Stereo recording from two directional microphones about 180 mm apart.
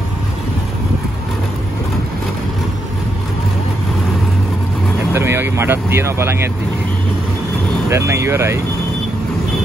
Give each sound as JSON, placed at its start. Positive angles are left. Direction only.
{"t": 5.1, "sound": "speech", "side_deg": -15}
{"t": 7.9, "sound": "speech", "side_deg": -15}